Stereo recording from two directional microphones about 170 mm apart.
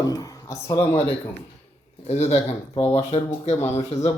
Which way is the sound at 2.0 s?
40° left (ahead or behind).